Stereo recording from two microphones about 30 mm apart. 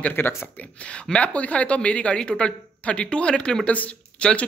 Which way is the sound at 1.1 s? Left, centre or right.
Left.